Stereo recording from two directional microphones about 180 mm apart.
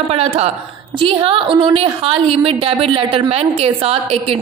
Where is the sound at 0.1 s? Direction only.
35° right (ahead or behind).